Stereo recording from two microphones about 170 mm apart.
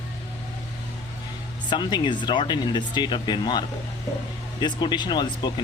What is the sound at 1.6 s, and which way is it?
Speech, 25° left (ahead or behind).